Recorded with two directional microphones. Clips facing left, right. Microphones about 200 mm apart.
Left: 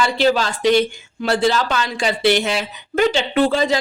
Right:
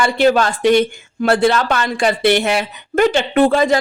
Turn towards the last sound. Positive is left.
turn(degrees=-55)  # may be behind; listen again after turning